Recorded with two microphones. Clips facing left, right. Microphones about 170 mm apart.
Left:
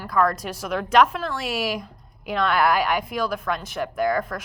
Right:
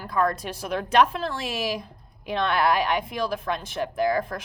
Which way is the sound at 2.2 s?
25° right (ahead or behind).